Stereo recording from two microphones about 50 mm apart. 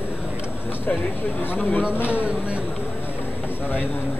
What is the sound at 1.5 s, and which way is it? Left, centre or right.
Speech, left.